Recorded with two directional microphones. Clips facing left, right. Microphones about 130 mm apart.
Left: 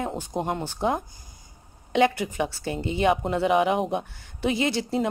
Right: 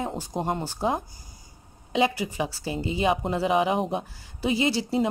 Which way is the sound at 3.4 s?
25° right (ahead or behind).